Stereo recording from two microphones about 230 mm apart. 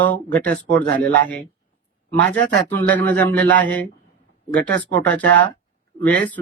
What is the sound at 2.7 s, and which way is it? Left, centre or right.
Speech, centre.